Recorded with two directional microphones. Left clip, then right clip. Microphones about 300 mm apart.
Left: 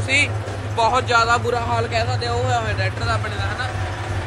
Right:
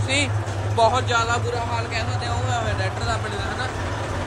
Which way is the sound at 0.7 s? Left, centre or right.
Centre.